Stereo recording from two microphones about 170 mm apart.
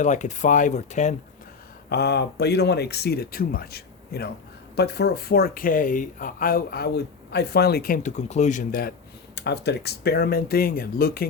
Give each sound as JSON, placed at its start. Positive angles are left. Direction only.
{"t": 0.0, "sound": "speech", "side_deg": 45}
{"t": 1.9, "sound": "speech", "side_deg": 75}
{"t": 9.3, "sound": "speech", "side_deg": 75}